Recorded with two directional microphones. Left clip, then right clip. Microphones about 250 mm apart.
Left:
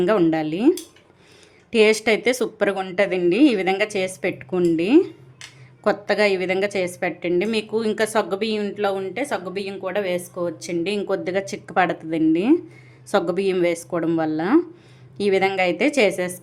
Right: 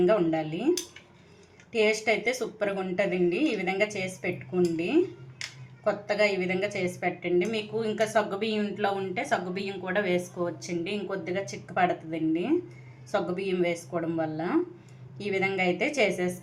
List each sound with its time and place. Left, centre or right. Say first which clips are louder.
0.0 s a woman's voice: left 5 dB; left
1.7 s a woman's voice: left 8 dB; left